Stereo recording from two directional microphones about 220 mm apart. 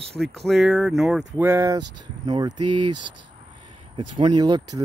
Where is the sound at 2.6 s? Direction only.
90° right.